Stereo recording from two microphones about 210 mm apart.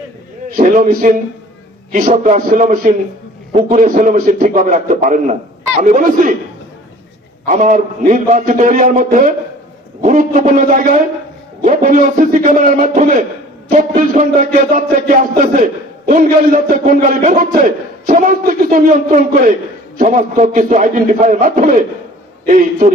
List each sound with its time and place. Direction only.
0.5 s a man's voice: 40° right (ahead or behind)
7.4 s a man's voice: 35° right (ahead or behind)